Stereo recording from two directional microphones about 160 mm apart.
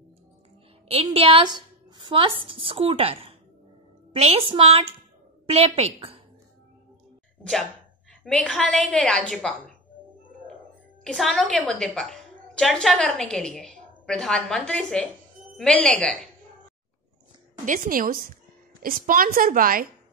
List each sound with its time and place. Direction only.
1.1 s a woman's voice: 35° right (ahead or behind)
8.2 s a woman's voice: 5° left (ahead or behind)
11.1 s a woman's voice: centre (ahead or behind)
17.6 s a woman's voice: 60° right (ahead or behind)